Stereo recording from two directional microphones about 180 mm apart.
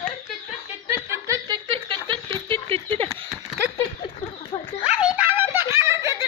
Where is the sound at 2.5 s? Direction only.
30° right (ahead or behind).